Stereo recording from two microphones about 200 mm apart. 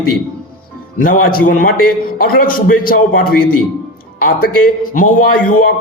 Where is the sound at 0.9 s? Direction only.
45° left (ahead or behind).